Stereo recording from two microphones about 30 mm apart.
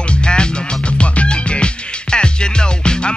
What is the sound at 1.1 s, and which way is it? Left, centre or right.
Music, left.